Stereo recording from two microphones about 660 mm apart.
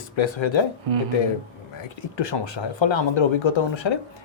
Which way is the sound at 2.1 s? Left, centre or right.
Left.